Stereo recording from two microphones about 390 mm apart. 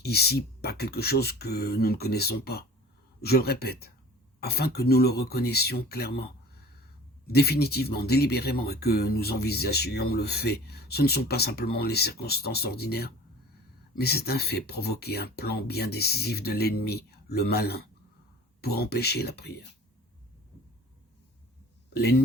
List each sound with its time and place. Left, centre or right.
0.0 s speech: left
7.3 s speech: left